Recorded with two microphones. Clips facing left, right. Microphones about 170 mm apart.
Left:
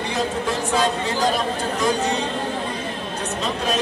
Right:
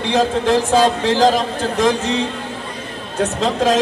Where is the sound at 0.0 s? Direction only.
90° right.